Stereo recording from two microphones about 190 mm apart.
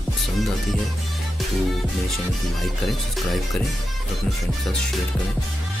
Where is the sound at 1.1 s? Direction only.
Centre (ahead or behind).